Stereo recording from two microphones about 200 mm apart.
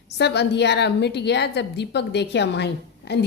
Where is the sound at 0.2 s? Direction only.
55° left (ahead or behind).